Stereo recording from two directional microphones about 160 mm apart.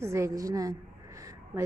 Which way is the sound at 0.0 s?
15° right (ahead or behind).